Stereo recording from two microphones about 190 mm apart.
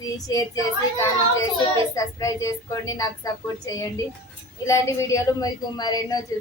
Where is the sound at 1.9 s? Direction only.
15° left (ahead or behind).